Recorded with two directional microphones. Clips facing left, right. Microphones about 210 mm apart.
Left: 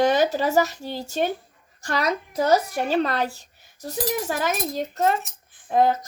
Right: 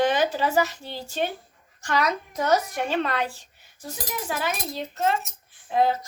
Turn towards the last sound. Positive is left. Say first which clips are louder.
# left 3 dB
turn(degrees=45)  # may be behind; listen again after turning